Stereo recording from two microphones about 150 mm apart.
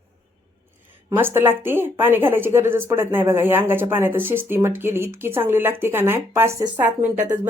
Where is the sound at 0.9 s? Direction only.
15° right (ahead or behind).